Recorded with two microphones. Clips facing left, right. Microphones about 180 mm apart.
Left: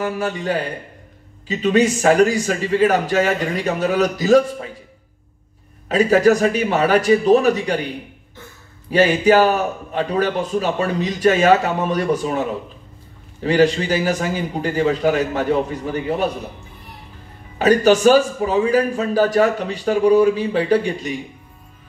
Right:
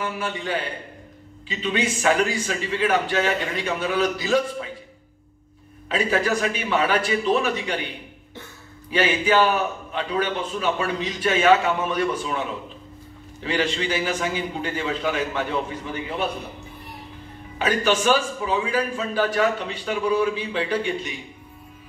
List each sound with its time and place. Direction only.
0.0 s a man's voice: 40° left (ahead or behind)
5.9 s a man's voice: 40° left (ahead or behind)
8.9 s a man's voice: 40° left (ahead or behind)
17.6 s a man's voice: 40° left (ahead or behind)